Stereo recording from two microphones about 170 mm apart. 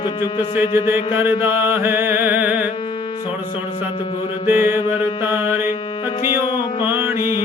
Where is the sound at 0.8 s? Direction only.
10° right (ahead or behind).